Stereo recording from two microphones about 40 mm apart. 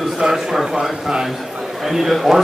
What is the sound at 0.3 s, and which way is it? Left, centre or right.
A man's voice, centre.